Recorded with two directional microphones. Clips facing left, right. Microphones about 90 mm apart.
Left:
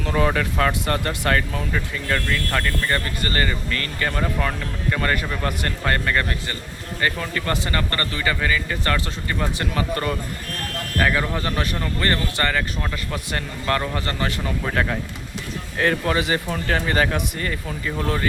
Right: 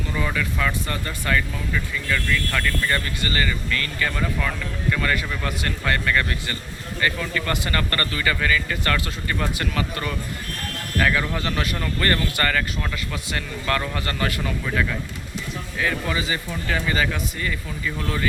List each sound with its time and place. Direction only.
0.3 s speech: 45° left (ahead or behind); by 11.3 s 25° left (ahead or behind)
11.3 s speech: 35° left (ahead or behind)
11.8 s speech: 20° left (ahead or behind)
15.8 s speech: 50° left (ahead or behind)